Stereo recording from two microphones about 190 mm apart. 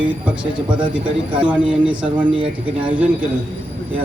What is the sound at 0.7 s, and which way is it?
Speech, 25° right (ahead or behind).